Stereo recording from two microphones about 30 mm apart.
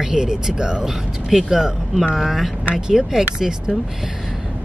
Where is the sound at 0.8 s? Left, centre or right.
Centre.